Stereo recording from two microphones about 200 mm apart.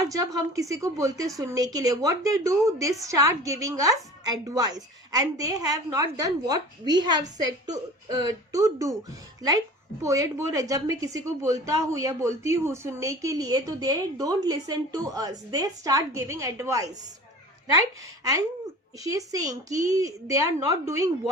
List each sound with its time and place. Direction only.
0.0 s speech: 15° right (ahead or behind)
10.0 s speech: 15° right (ahead or behind)
18.9 s speech: 15° right (ahead or behind)